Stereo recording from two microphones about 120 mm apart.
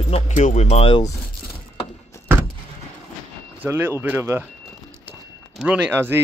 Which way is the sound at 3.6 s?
15° right (ahead or behind).